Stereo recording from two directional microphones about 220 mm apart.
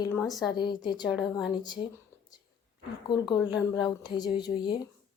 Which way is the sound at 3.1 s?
20° left (ahead or behind).